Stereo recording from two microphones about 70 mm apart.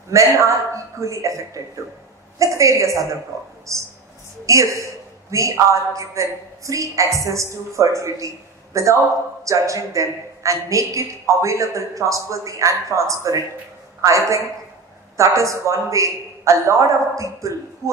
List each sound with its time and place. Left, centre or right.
0.1 s a woman's voice: right